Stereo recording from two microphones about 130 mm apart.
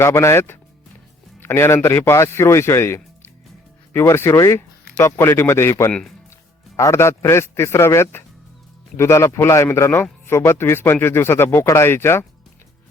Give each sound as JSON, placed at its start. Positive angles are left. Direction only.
{"t": 0.0, "sound": "a man's voice", "side_deg": 20}